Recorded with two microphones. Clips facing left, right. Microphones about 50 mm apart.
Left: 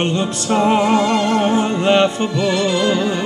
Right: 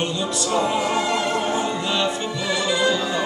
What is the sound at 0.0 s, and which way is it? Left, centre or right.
Music, left.